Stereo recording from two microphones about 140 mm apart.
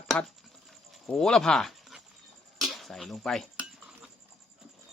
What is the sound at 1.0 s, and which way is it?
Speech, 5° left (ahead or behind).